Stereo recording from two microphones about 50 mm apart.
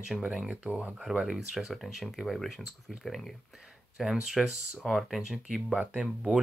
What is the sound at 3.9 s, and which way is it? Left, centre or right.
Speech, centre.